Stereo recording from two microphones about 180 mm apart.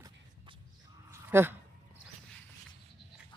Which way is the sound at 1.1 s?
10° right (ahead or behind).